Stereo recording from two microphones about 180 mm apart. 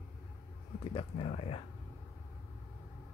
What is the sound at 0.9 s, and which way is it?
Speech, 30° left (ahead or behind).